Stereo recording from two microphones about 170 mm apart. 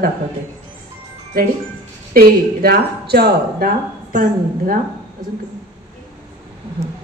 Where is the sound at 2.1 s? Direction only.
65° right (ahead or behind).